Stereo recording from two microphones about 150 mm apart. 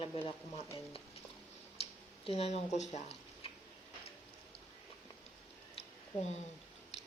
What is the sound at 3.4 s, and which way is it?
Tick-tock, 40° left (ahead or behind).